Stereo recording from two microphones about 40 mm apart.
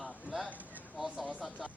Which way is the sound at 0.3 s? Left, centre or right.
Right.